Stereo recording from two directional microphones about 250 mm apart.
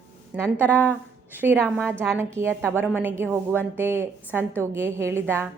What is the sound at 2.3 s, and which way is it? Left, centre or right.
A woman's voice, centre.